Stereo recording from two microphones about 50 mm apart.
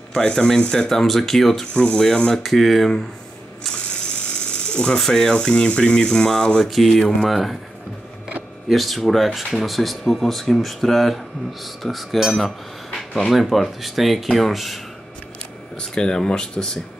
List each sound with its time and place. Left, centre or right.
0.1 s speech: centre
1.7 s speech: centre
3.7 s speech: centre
8.6 s speech: centre
15.8 s speech: centre